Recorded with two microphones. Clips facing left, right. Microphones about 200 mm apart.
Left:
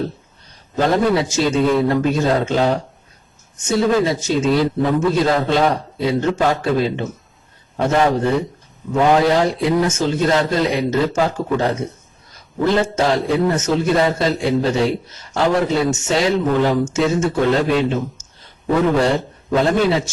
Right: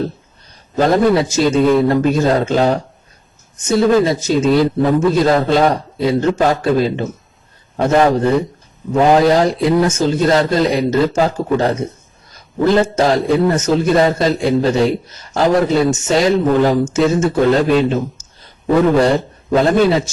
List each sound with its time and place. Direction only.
0.8 s a man's voice: 40° right (ahead or behind)
18.9 s a man's voice: 40° right (ahead or behind)